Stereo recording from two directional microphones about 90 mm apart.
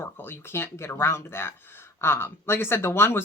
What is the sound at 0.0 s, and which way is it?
Speech, 25° left (ahead or behind).